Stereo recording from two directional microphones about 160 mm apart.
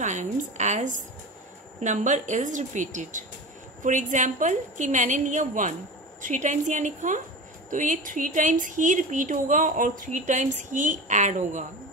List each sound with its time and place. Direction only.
0.0 s speech: 50° right (ahead or behind)